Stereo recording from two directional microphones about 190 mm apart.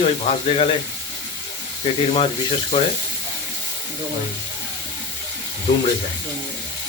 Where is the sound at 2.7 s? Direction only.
25° left (ahead or behind).